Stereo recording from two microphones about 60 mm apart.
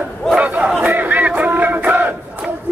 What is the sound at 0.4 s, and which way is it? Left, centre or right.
Battle cry, right.